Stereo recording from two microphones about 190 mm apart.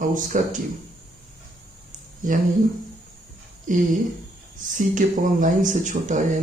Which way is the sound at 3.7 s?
45° right (ahead or behind).